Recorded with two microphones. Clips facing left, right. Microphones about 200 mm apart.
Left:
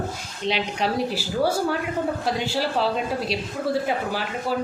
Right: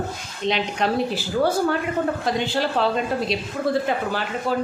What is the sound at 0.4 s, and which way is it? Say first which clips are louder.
A woman's voice: right 2 dB; 5° left (ahead or behind).